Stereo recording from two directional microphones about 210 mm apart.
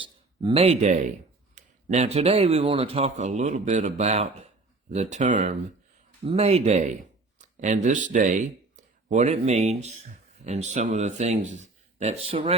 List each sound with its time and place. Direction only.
0.0 s speech: 25° right (ahead or behind)